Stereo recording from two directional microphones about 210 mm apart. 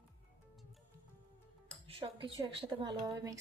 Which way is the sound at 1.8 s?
25° right (ahead or behind).